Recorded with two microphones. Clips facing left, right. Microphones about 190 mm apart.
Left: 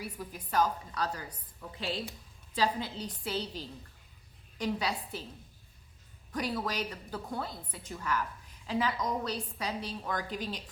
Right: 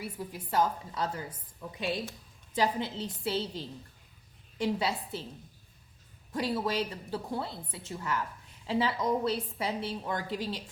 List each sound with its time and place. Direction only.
0.0 s a woman's voice: 25° right (ahead or behind)
6.3 s a woman's voice: 25° right (ahead or behind)